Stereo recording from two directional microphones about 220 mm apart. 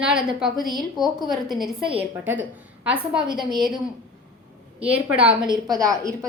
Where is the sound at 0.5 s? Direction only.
20° right (ahead or behind).